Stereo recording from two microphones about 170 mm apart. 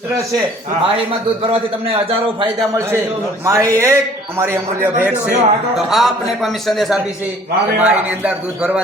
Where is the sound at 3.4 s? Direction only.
15° right (ahead or behind).